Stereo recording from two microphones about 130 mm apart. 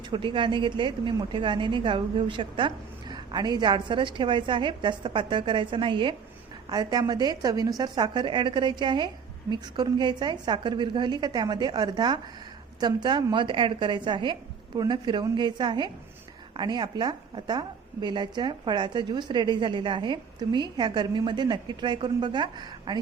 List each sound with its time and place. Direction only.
0.0 s a woman's voice: 40° right (ahead or behind)